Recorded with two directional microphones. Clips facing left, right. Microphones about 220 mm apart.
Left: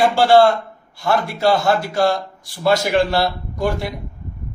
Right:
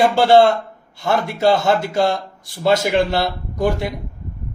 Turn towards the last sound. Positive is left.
turn(degrees=-20)  # may be behind; listen again after turning